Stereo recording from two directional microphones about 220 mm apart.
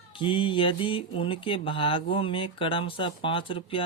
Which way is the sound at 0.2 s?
25° left (ahead or behind).